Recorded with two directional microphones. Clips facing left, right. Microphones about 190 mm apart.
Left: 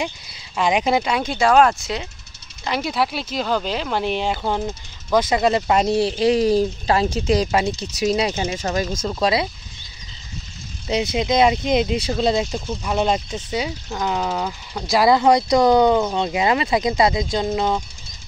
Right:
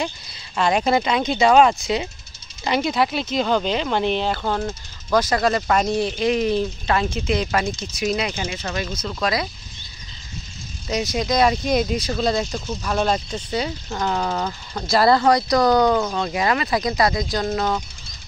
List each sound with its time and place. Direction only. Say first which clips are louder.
0.6 s speech: even; 15° left (ahead or behind)
8.5 s speech: left 4 dB; 40° left (ahead or behind)
9.1 s speech: left 3 dB; 30° left (ahead or behind)
10.9 s speech: left 2 dB; 25° left (ahead or behind)